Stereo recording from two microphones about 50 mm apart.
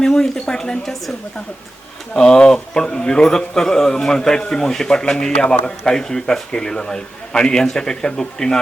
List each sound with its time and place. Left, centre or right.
0.0 s speech: centre
2.1 s speech: centre